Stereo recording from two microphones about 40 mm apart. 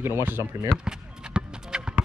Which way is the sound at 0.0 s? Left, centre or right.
Right.